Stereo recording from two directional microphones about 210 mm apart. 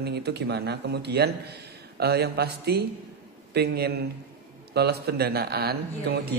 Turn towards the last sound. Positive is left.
turn(degrees=-50)  # may be behind; listen again after turning